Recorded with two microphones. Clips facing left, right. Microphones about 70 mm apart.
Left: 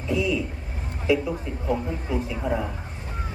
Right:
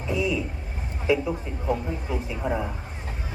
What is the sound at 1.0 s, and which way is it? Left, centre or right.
Speech, right.